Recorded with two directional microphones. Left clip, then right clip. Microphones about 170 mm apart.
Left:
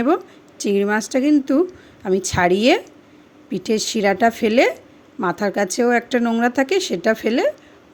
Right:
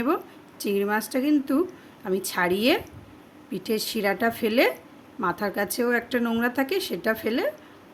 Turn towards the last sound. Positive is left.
turn(degrees=40)  # may be behind; listen again after turning